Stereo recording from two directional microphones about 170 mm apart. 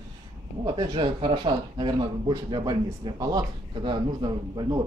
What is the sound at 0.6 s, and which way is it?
Speech, 30° right (ahead or behind).